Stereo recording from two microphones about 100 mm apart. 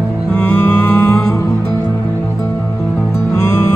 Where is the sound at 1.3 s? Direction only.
30° left (ahead or behind).